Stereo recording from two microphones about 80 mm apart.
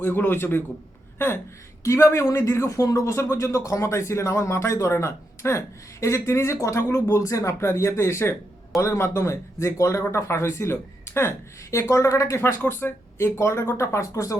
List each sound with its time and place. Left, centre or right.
0.0 s a man's voice: left
1.8 s speech: left
12.4 s speech: left